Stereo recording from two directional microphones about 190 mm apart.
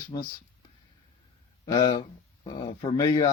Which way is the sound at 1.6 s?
20° left (ahead or behind).